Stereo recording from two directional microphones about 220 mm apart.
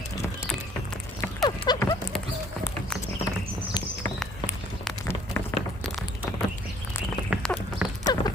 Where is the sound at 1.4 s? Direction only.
20° left (ahead or behind).